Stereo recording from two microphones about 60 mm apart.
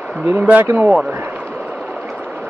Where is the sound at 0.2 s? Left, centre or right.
Right.